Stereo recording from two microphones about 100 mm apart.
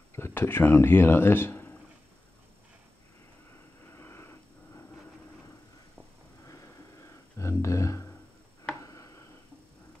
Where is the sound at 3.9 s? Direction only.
25° left (ahead or behind).